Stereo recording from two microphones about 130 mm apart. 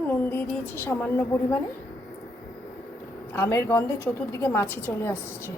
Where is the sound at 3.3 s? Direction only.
20° left (ahead or behind).